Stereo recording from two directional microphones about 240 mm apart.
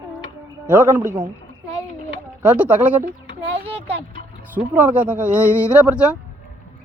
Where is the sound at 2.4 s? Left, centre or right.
Centre.